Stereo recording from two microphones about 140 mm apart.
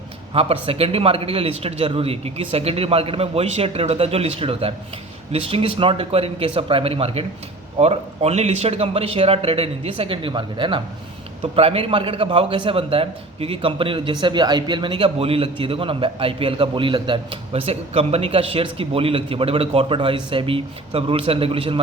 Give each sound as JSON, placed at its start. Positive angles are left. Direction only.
{"t": 0.3, "sound": "a man's voice", "side_deg": -40}